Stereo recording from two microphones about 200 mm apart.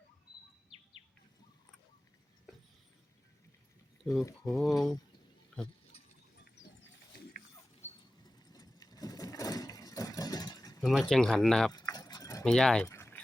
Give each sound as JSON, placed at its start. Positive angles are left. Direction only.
{"t": 4.0, "sound": "speech", "side_deg": 0}
{"t": 8.2, "sound": "a sound", "side_deg": 20}
{"t": 10.8, "sound": "speech", "side_deg": 0}
{"t": 11.7, "sound": "keys jangling", "side_deg": 20}
{"t": 12.5, "sound": "speech", "side_deg": 5}
{"t": 12.9, "sound": "a sound", "side_deg": 10}